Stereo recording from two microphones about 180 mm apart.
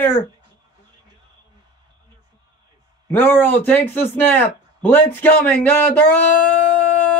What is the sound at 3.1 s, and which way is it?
A man's voice, 10° left (ahead or behind).